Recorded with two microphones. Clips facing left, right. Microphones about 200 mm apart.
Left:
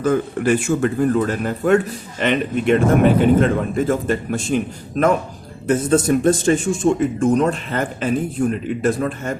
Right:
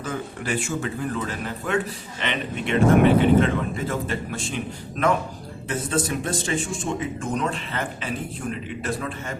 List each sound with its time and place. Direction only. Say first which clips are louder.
0.0 s speech: left 12 dB; 50° left (ahead or behind)